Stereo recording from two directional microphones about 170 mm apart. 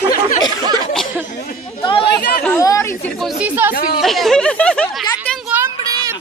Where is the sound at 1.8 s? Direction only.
30° left (ahead or behind).